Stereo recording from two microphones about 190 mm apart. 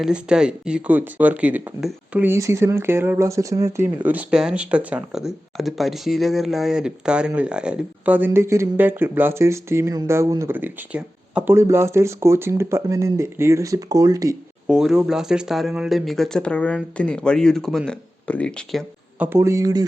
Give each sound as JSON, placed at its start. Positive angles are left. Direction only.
{"t": 0.0, "sound": "speech", "side_deg": -5}
{"t": 14.7, "sound": "speech", "side_deg": -5}
{"t": 19.2, "sound": "speech", "side_deg": -15}